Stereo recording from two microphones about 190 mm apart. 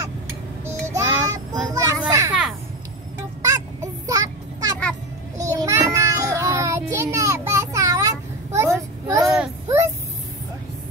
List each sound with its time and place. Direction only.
0.7 s child singing: 15° right (ahead or behind)
1.7 s children playing: 20° right (ahead or behind)
3.4 s a sound: 20° right (ahead or behind)
9.3 s child singing: 10° right (ahead or behind)